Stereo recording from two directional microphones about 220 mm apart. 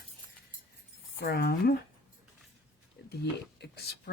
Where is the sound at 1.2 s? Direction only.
45° left (ahead or behind).